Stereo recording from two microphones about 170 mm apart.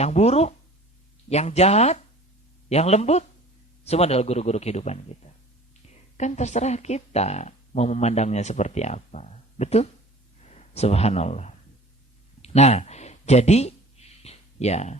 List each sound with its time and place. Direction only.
0.0 s speech: 40° left (ahead or behind)
6.1 s speech: 45° left (ahead or behind)
14.2 s a sound: 40° left (ahead or behind)